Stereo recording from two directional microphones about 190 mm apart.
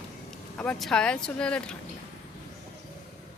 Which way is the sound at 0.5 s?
5° left (ahead or behind).